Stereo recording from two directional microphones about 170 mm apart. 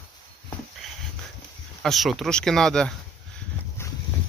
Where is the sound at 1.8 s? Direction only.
Centre (ahead or behind).